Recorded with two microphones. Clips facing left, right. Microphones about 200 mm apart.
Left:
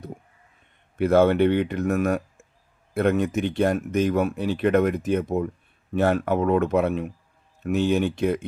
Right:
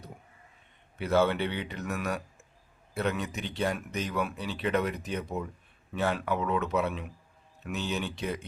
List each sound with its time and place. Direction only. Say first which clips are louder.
0.9 s speech: left 8 dB; 50° left (ahead or behind)